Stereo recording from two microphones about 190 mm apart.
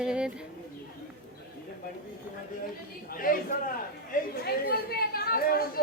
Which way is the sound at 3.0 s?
50° left (ahead or behind).